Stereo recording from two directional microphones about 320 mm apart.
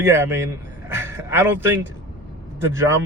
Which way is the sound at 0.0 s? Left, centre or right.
Centre.